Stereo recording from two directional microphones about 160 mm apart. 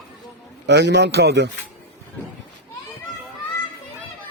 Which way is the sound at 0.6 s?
90° right.